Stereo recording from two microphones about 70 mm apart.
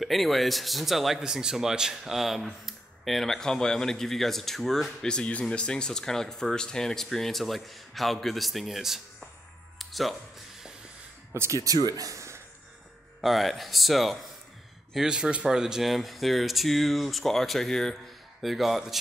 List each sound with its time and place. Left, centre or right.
0.0 s speech: centre
5.1 s speech: centre
9.8 s music: centre
11.3 s speech: right
11.6 s speech: right
13.2 s speech: centre